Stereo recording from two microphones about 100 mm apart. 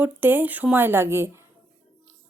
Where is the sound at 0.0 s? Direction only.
20° right (ahead or behind).